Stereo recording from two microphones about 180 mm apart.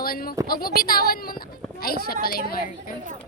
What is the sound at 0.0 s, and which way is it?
A woman's voice, 55° left (ahead or behind).